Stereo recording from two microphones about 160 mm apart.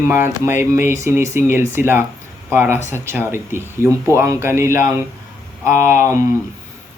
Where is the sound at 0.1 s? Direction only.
15° right (ahead or behind).